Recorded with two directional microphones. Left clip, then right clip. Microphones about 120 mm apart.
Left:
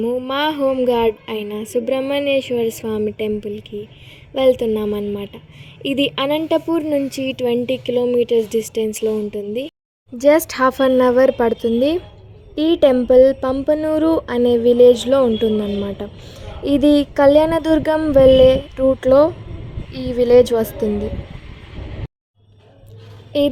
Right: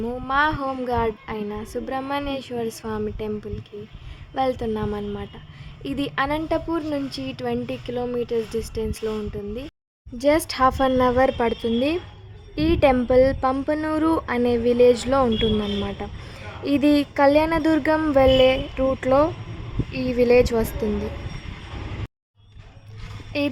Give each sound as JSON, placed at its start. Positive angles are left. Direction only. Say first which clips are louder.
{"t": 0.0, "sound": "speech", "louder": "left 3 dB", "side_deg": 25}
{"t": 12.5, "sound": "speech", "louder": "left 5 dB", "side_deg": 25}
{"t": 23.3, "sound": "speech", "louder": "left 8 dB", "side_deg": 20}